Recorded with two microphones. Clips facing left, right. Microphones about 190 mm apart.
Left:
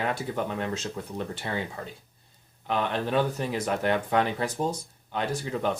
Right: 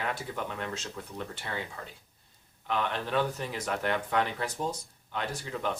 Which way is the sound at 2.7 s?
25° left (ahead or behind).